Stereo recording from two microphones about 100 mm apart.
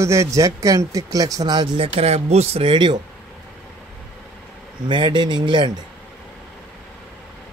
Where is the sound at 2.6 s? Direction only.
50° right (ahead or behind).